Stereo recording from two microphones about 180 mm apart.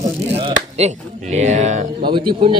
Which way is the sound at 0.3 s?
35° right (ahead or behind).